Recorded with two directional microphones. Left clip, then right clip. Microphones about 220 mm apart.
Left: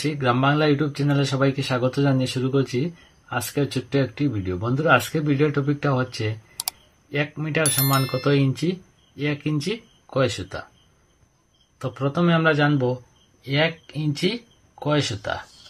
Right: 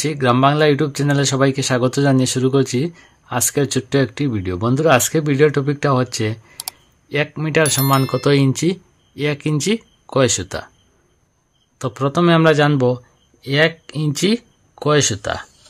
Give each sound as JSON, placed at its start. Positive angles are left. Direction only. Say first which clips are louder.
{"t": 0.0, "sound": "speech", "louder": "right 6 dB", "side_deg": -45}
{"t": 6.6, "sound": "computer keyboard", "louder": "left 3 dB", "side_deg": 0}
{"t": 7.1, "sound": "speech", "louder": "right 6 dB", "side_deg": -45}
{"t": 11.8, "sound": "speech", "louder": "right 7 dB", "side_deg": -45}